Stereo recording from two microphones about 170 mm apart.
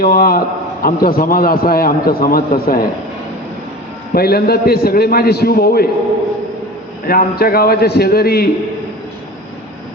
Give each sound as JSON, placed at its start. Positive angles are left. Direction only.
{"t": 0.0, "sound": "a man's voice", "side_deg": 60}
{"t": 4.1, "sound": "a man's voice", "side_deg": 65}
{"t": 7.1, "sound": "a man's voice", "side_deg": 60}